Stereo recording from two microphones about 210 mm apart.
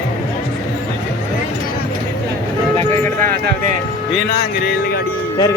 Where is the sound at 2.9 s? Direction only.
35° right (ahead or behind).